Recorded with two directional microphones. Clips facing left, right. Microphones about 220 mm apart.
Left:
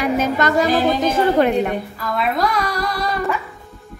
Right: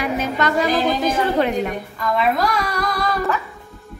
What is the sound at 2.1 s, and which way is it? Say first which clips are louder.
Speech: even; centre (ahead or behind).